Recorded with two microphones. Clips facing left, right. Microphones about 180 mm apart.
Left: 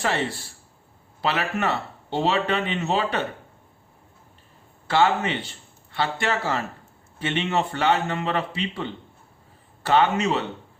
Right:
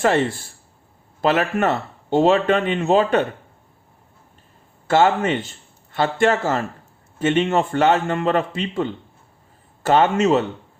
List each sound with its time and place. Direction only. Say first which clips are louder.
0.0 s speech: right 7 dB; 50° right (ahead or behind)
4.9 s speech: right 4 dB; 45° right (ahead or behind)